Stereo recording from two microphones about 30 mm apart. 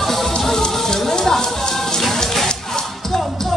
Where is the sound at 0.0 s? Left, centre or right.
Centre.